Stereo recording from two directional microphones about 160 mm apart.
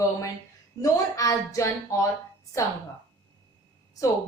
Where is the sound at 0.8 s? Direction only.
20° left (ahead or behind).